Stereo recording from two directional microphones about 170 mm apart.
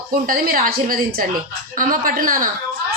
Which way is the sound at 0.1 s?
55° right (ahead or behind).